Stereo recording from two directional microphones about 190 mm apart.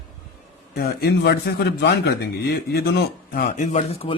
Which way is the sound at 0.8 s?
55° left (ahead or behind).